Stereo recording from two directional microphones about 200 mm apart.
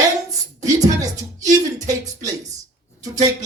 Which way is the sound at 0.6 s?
15° right (ahead or behind).